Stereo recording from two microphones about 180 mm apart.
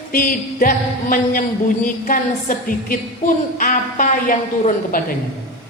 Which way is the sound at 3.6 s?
50° left (ahead or behind).